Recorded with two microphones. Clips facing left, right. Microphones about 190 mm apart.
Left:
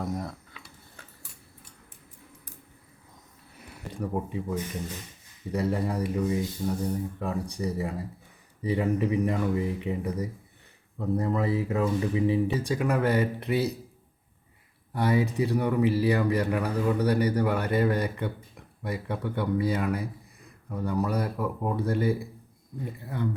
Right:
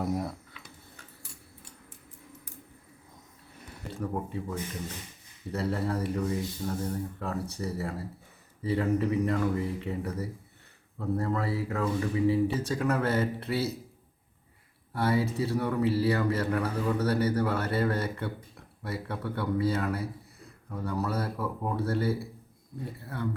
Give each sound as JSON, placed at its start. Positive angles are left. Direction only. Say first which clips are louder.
{"t": 0.0, "sound": "a sound", "louder": "right 2 dB", "side_deg": -5}
{"t": 4.1, "sound": "speech", "louder": "left 6 dB", "side_deg": 15}
{"t": 14.9, "sound": "speech", "louder": "left 2 dB", "side_deg": 15}